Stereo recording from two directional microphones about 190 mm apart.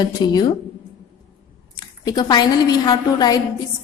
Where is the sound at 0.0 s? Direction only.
20° left (ahead or behind).